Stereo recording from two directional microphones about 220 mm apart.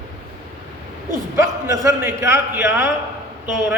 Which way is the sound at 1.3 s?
15° right (ahead or behind).